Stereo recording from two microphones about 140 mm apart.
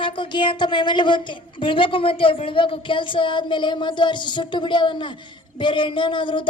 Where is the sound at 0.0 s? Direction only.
35° left (ahead or behind).